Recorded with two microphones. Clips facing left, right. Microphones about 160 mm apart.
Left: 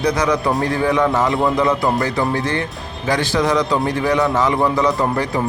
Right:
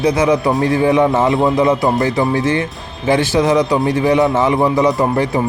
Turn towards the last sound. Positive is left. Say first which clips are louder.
# right 4 dB
turn(degrees=-20)  # may be behind; listen again after turning